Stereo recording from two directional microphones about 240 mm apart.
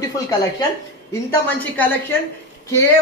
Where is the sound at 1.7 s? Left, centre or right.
Centre.